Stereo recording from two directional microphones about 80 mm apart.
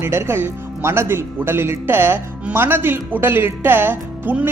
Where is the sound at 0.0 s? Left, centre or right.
Right.